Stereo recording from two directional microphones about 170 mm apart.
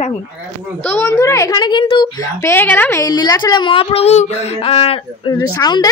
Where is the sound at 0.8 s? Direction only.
15° left (ahead or behind); by 5.4 s 35° left (ahead or behind).